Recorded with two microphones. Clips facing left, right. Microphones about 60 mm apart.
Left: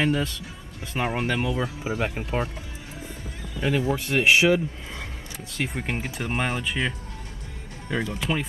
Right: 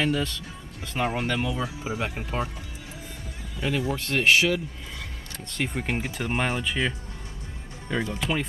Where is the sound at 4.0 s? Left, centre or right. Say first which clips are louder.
Left 1 dB; centre.